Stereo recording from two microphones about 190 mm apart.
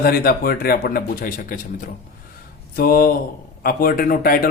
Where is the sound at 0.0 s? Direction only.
55° left (ahead or behind).